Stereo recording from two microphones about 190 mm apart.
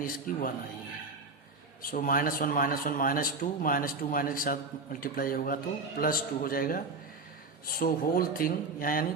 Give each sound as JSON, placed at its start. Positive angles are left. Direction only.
{"t": 0.0, "sound": "speech", "side_deg": 45}
{"t": 1.8, "sound": "speech", "side_deg": 50}